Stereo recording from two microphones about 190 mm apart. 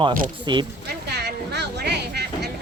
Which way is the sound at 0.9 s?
60° right (ahead or behind).